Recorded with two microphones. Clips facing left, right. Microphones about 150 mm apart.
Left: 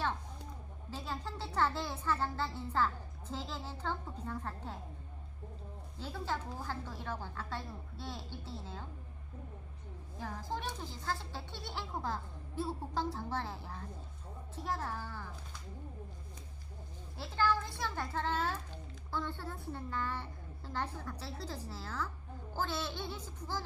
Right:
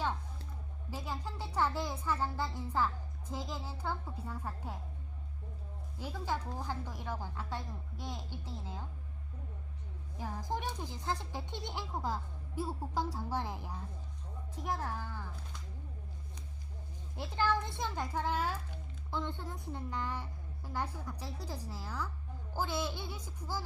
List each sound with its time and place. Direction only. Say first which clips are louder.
0.9 s speech: even; 10° right (ahead or behind)
6.0 s speech: right 1 dB; 10° right (ahead or behind)
10.2 s speech: right 2 dB; 15° right (ahead or behind)
17.2 s speech: even; 20° right (ahead or behind)